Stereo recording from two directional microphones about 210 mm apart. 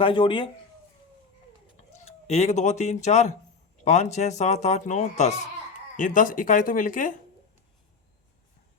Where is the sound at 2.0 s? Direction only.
30° left (ahead or behind).